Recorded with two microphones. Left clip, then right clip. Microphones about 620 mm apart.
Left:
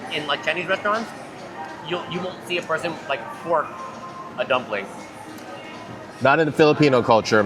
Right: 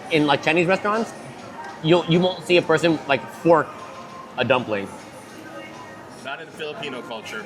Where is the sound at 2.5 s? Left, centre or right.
Right.